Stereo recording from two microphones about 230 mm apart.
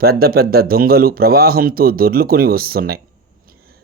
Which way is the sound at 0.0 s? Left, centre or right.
Right.